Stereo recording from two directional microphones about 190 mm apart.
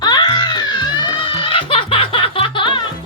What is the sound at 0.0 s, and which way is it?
Music, 20° left (ahead or behind).